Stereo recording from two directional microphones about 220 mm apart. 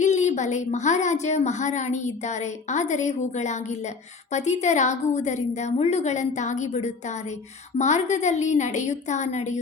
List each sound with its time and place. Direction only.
0.0 s a woman's voice: 30° left (ahead or behind)